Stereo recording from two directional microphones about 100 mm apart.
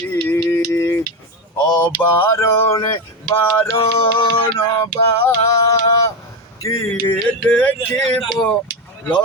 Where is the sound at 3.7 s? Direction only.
65° left (ahead or behind).